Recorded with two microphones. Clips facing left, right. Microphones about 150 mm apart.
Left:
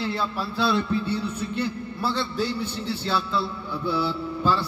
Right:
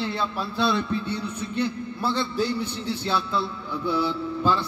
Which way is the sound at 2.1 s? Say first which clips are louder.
Right 2 dB; 15° right (ahead or behind).